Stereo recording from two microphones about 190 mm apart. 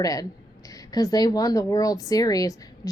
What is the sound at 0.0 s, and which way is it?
Speech, 20° left (ahead or behind).